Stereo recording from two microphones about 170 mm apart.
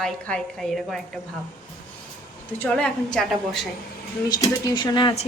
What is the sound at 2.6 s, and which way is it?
Speech, 5° left (ahead or behind).